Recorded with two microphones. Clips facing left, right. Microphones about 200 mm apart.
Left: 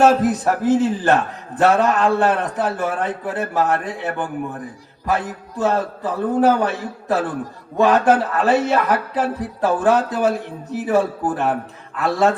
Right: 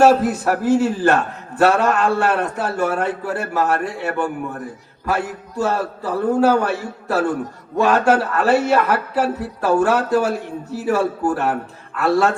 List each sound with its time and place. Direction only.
0.0 s a man's voice: 15° left (ahead or behind)